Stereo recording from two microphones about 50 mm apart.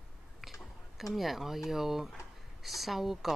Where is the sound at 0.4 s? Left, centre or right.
Centre.